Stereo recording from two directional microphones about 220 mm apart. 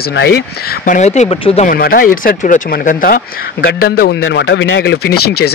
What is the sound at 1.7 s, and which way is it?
Speech, 40° left (ahead or behind).